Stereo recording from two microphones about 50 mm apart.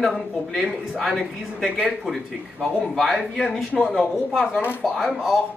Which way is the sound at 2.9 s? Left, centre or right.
Centre.